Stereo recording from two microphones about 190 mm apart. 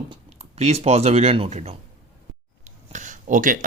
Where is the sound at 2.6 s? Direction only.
40° right (ahead or behind).